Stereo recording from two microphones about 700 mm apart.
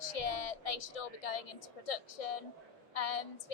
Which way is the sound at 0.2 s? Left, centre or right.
Left.